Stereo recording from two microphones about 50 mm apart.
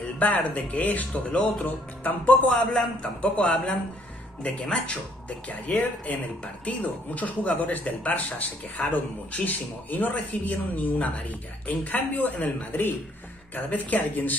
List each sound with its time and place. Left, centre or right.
0.2 s a man's voice: left
5.5 s speech: left